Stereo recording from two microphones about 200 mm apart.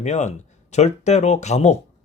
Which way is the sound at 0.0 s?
35° left (ahead or behind).